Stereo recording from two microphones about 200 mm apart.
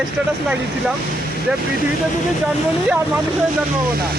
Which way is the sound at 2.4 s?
5° right (ahead or behind).